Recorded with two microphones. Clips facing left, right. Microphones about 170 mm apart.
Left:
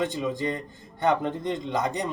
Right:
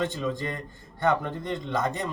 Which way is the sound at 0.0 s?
15° left (ahead or behind).